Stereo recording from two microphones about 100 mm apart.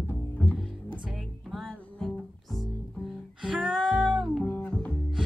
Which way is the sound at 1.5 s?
Centre (ahead or behind).